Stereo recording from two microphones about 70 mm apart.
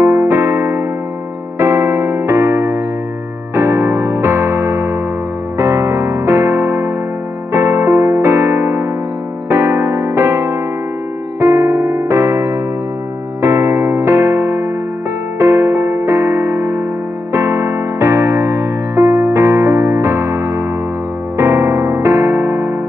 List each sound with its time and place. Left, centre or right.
0.0 s electric piano: right
3.5 s music: right
9.5 s electric piano: right
11.3 s music: right
21.4 s electric piano: right